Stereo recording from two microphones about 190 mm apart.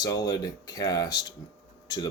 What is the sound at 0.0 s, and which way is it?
Speech, 20° left (ahead or behind).